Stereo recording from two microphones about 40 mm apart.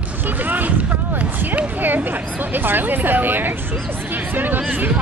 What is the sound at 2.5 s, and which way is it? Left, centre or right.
Speech, right.